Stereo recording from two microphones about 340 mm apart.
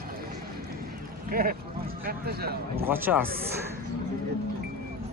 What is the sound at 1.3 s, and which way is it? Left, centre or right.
Speech, right.